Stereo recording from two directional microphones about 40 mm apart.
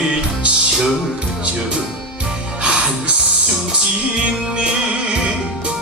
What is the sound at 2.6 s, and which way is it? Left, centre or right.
Music, right.